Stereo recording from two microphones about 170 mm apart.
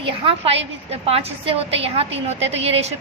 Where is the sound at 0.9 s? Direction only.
35° right (ahead or behind).